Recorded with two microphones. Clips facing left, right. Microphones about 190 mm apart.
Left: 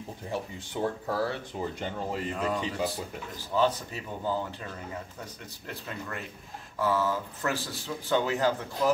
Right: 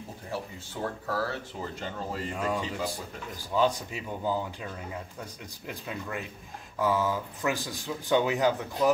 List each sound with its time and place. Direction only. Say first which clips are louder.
1.0 s speech: left 1 dB; 20° left (ahead or behind)
2.3 s speech: right 1 dB; 10° right (ahead or behind)